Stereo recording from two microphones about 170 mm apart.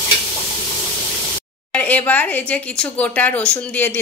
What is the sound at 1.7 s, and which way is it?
Speech, 10° left (ahead or behind).